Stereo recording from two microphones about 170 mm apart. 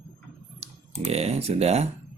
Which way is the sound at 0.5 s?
40° right (ahead or behind).